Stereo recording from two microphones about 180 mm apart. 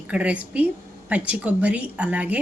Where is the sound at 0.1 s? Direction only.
5° right (ahead or behind).